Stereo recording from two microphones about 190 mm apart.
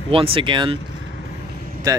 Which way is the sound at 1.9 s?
20° right (ahead or behind).